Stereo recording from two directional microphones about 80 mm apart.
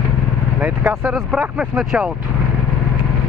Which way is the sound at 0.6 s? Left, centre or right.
Right.